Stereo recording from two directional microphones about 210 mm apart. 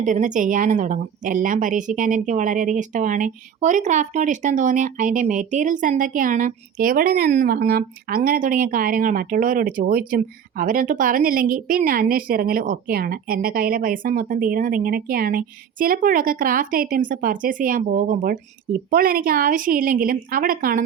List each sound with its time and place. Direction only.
0.0 s speech: 35° right (ahead or behind)